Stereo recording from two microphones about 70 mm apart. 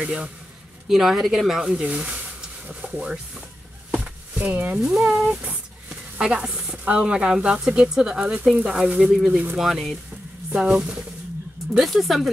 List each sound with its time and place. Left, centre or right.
0.8 s speech: centre
1.8 s speech: centre
4.4 s speech: right
4.8 s speech: centre
10.5 s speech: centre
11.8 s speech: centre